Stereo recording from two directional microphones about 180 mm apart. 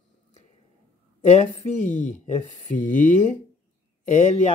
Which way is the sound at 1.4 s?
45° left (ahead or behind).